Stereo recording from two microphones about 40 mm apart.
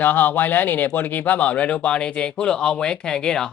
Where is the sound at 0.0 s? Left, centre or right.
Left.